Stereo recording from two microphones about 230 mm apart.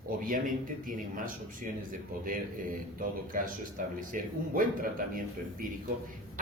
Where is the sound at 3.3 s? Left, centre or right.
Right.